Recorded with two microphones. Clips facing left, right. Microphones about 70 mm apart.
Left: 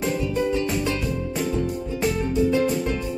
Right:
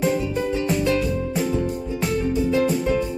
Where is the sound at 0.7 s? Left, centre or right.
Centre.